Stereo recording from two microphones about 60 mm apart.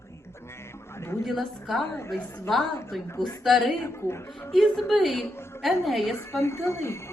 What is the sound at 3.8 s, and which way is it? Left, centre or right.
Speech, left.